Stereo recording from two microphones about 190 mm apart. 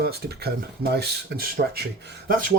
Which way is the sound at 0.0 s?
55° right (ahead or behind).